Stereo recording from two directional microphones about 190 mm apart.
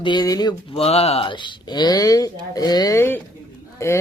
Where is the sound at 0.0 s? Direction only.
20° left (ahead or behind).